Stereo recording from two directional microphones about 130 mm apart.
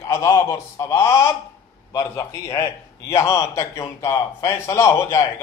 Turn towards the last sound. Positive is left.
turn(degrees=20)  # may be behind; listen again after turning